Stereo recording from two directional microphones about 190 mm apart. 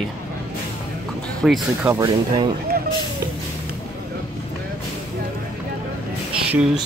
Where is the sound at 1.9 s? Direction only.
25° right (ahead or behind).